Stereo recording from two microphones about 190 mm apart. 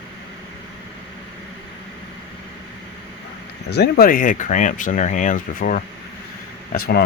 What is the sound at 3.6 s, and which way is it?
Speech, 60° left (ahead or behind).